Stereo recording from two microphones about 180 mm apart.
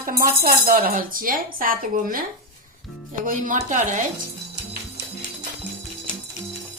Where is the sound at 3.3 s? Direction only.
45° right (ahead or behind).